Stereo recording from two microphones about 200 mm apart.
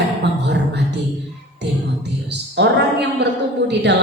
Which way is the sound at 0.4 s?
60° right (ahead or behind).